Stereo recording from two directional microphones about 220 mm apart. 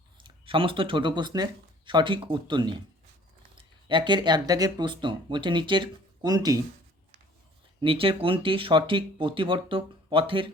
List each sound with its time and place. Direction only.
0.2 s speech: 20° right (ahead or behind)
7.8 s speech: 25° right (ahead or behind)